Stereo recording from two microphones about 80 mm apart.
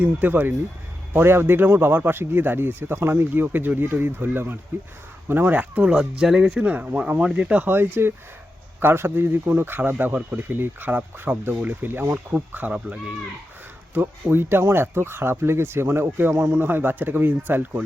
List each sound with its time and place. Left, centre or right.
0.0 s a man's voice: right; by 6.7 s centre
6.7 s a man's voice: centre